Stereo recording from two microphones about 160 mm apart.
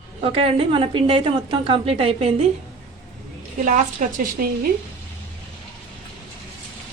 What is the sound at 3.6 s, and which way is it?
A woman's voice, 55° right (ahead or behind).